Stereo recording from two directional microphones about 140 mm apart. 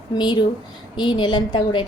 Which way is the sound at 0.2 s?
30° left (ahead or behind).